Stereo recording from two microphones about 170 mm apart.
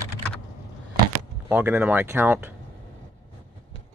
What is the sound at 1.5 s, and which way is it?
Speech, 10° right (ahead or behind).